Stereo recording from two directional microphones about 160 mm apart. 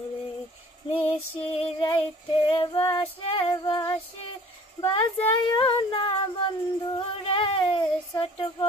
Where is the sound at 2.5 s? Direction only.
30° left (ahead or behind).